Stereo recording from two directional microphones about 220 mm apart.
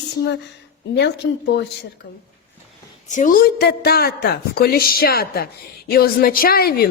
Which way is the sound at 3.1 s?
35° left (ahead or behind).